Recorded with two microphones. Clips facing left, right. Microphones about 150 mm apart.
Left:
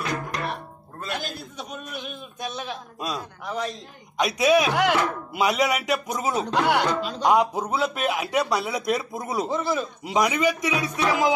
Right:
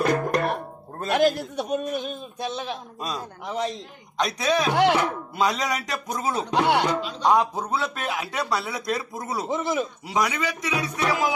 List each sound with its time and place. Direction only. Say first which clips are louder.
0.0 s music: right 7 dB; 50° right (ahead or behind)
1.1 s a man's voice: right 13 dB; 85° right
1.7 s speech: right 10 dB; 45° right (ahead or behind); by 3.7 s 25° right (ahead or behind)
4.2 s speech: left 3 dB; 10° left (ahead or behind)
4.7 s speech: right 2 dB; 25° right (ahead or behind)
5.3 s speech: left 4 dB; 10° left (ahead or behind)
6.5 s speech: right 2 dB; 25° right (ahead or behind)
7.2 s speech: left 1 dB; 15° left (ahead or behind)
9.5 s speech: right 3 dB; 20° right (ahead or behind)
10.0 s speech: left 7 dB; 20° left (ahead or behind)